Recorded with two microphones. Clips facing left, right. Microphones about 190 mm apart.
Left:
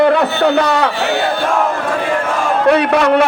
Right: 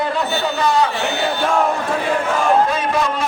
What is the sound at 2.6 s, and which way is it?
Speech, 70° left (ahead or behind).